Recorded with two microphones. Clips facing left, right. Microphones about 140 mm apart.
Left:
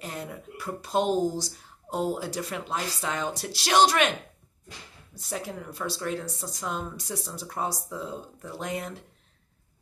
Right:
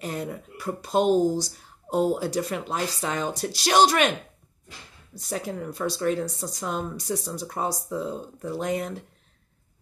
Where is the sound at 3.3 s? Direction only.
45° right (ahead or behind).